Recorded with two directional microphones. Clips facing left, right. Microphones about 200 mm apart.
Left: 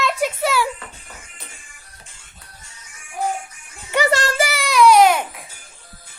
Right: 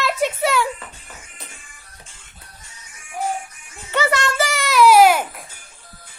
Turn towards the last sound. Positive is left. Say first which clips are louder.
# right 1 dB
turn(degrees=-5)  # may be behind; listen again after turning